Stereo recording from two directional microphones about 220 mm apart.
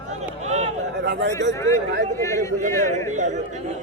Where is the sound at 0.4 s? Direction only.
30° right (ahead or behind).